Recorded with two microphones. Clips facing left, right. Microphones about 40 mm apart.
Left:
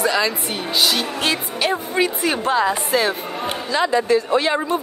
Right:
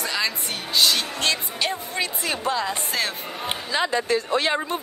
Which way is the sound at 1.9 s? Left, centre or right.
Left.